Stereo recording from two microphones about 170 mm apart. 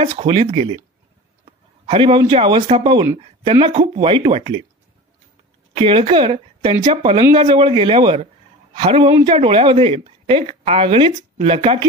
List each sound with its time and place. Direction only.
0.0 s a man's voice: 30° right (ahead or behind)
5.8 s speech: 30° right (ahead or behind)